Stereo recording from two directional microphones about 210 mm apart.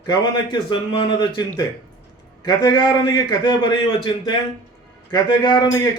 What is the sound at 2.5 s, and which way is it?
A man's voice, 20° left (ahead or behind).